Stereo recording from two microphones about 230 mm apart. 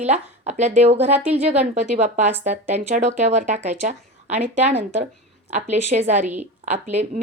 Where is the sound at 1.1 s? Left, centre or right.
Centre.